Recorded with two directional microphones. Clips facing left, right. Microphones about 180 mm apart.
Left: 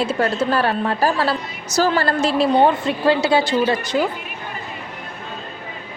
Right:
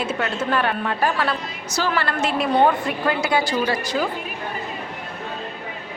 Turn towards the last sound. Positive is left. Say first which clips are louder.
# left 4 dB
turn(degrees=20)  # may be behind; listen again after turning